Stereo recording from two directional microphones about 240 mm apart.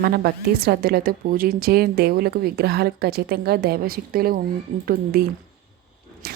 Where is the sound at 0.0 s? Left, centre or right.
Right.